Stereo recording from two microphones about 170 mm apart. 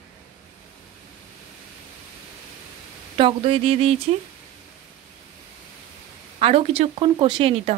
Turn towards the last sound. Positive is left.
turn(degrees=-35)  # may be behind; listen again after turning